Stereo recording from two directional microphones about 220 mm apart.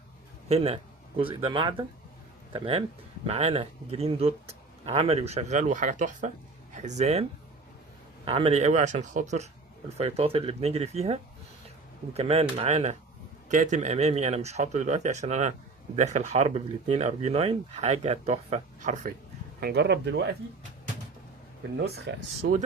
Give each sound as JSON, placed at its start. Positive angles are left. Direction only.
{"t": 0.4, "sound": "speech", "side_deg": -30}
{"t": 19.5, "sound": "speech", "side_deg": -45}
{"t": 21.8, "sound": "speech", "side_deg": -45}